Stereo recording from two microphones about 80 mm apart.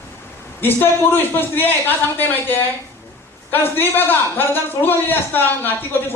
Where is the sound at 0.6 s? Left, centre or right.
Left.